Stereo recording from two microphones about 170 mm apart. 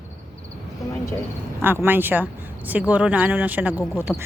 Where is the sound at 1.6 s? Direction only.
10° right (ahead or behind).